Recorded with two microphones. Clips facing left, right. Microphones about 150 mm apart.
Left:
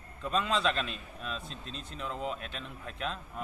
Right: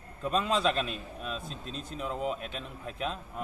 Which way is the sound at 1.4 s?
40° right (ahead or behind).